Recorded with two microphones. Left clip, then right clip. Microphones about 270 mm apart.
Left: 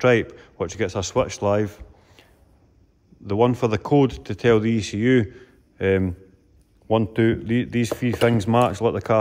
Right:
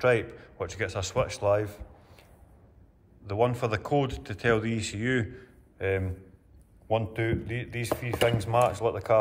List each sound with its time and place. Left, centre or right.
0.0 s a man's voice: left
3.3 s speech: left